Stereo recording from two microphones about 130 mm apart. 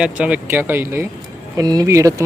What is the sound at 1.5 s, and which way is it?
Speech, 30° right (ahead or behind).